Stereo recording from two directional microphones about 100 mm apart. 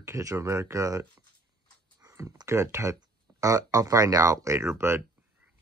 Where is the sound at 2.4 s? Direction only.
30° right (ahead or behind).